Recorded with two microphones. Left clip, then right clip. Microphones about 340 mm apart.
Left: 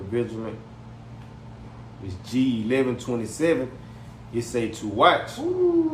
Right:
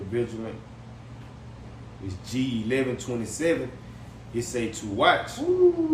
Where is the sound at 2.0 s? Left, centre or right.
Centre.